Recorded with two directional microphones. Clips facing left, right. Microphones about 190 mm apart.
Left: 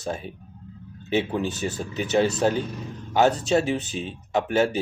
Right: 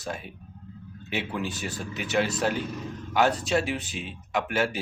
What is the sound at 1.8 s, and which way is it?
Speech, 35° left (ahead or behind).